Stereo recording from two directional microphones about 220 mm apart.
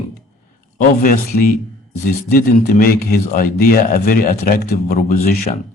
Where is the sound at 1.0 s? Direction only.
45° left (ahead or behind).